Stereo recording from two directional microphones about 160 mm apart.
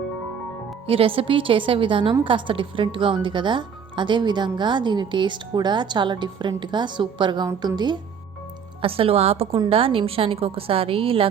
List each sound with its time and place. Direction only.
0.9 s a woman's voice: 35° right (ahead or behind)
8.8 s a woman's voice: 35° right (ahead or behind)